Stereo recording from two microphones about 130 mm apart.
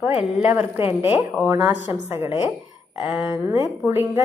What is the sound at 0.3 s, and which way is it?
A woman's voice, 10° right (ahead or behind).